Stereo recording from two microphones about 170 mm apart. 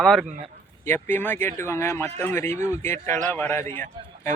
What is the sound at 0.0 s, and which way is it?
A man's voice, 5° left (ahead or behind).